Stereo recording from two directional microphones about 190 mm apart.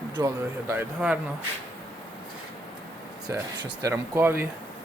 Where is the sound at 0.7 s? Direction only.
10° right (ahead or behind).